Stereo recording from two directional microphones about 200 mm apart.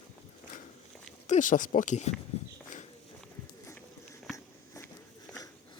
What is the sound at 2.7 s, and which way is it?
Walk, 40° left (ahead or behind).